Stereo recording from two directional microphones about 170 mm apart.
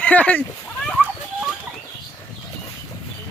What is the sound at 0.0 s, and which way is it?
Speech, 10° left (ahead or behind).